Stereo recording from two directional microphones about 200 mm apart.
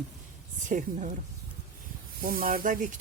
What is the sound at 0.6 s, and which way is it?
Speech, 40° right (ahead or behind).